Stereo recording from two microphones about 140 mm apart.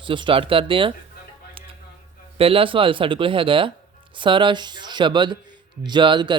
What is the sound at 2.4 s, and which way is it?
Speech, 40° right (ahead or behind).